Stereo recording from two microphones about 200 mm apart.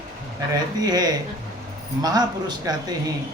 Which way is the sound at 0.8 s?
20° right (ahead or behind).